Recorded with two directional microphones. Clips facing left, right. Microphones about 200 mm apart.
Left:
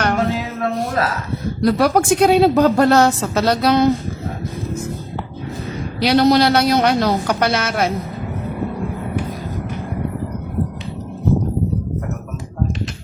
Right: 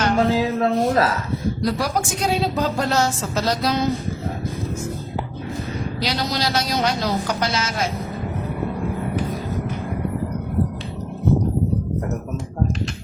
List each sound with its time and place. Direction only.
0.3 s speech: 30° right (ahead or behind)
1.6 s a woman's voice: 60° left (ahead or behind)
6.0 s a woman's voice: 60° left (ahead or behind)